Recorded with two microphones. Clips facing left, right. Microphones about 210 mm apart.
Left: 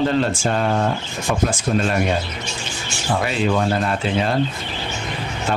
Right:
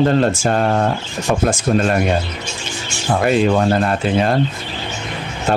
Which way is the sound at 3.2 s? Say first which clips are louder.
Right 6 dB; 45° right (ahead or behind).